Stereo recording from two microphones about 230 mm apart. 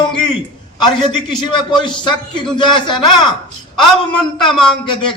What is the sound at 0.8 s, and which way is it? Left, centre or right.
A man's voice, centre.